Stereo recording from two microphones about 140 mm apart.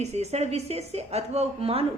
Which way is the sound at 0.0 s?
50° right (ahead or behind).